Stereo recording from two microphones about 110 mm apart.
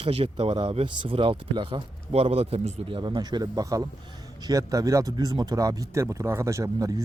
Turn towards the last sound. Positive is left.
turn(degrees=-30)  # may be behind; listen again after turning